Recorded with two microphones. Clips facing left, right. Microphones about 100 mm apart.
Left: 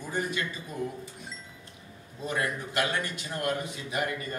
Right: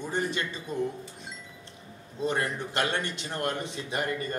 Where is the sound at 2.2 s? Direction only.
30° right (ahead or behind).